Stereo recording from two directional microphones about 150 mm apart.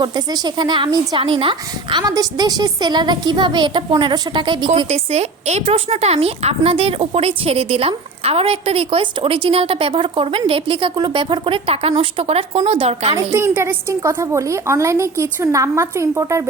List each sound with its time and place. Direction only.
0.0 s a woman's voice: 30° right (ahead or behind)
4.9 s a woman's voice: 45° right (ahead or behind)
13.1 s a woman's voice: 20° right (ahead or behind)